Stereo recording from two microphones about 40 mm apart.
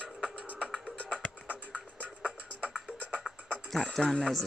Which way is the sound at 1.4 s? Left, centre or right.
Right.